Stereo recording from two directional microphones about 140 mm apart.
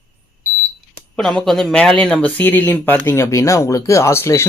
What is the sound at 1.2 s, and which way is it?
Speech, 5° left (ahead or behind).